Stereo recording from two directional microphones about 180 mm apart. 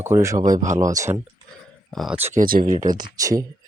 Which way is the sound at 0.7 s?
15° right (ahead or behind).